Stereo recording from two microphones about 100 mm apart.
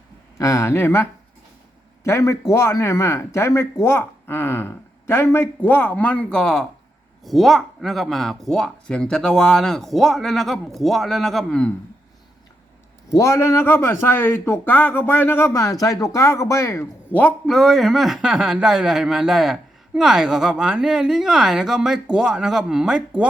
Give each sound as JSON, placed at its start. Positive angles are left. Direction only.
{"t": 0.3, "sound": "speech", "side_deg": 30}
{"t": 2.0, "sound": "speech", "side_deg": 30}
{"t": 13.1, "sound": "speech", "side_deg": 30}
{"t": 15.5, "sound": "speech", "side_deg": 35}
{"t": 17.1, "sound": "a man's voice", "side_deg": 15}
{"t": 17.4, "sound": "speech", "side_deg": 5}